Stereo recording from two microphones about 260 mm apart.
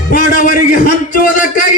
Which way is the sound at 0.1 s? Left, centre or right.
Left.